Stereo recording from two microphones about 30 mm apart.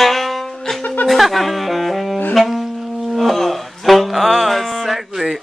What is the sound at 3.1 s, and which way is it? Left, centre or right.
Music, centre.